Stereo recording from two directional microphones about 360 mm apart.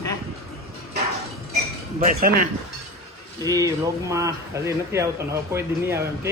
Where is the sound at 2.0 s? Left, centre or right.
Right.